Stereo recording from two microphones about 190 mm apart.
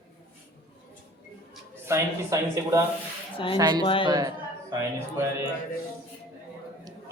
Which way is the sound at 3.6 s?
20° right (ahead or behind).